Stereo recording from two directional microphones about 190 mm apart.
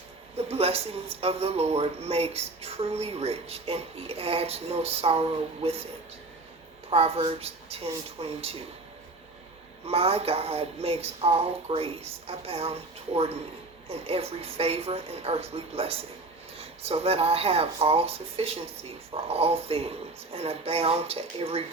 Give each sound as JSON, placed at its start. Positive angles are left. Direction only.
{"t": 0.3, "sound": "speech", "side_deg": -30}
{"t": 6.9, "sound": "speech", "side_deg": -30}
{"t": 9.8, "sound": "speech", "side_deg": -30}